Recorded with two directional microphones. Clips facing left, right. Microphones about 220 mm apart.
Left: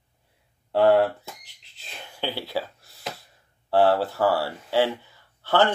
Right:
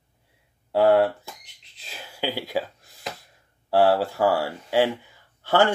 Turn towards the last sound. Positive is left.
turn(degrees=-15)  # may be behind; listen again after turning